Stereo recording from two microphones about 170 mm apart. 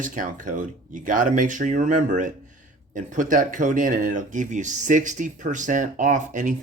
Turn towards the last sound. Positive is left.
turn(degrees=-45)  # may be behind; listen again after turning